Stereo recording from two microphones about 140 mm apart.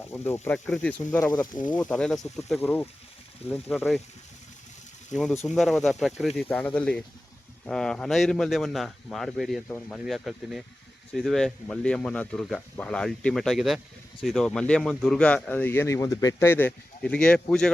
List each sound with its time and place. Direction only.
0.1 s speech: 15° left (ahead or behind); by 2.6 s centre (ahead or behind)
2.6 s speech: 15° left (ahead or behind)
3.5 s speech: centre (ahead or behind)
5.1 s speech: centre (ahead or behind)
6.5 s speech: 10° left (ahead or behind)
9.6 s speech: 15° left (ahead or behind)
10.1 s speech: centre (ahead or behind)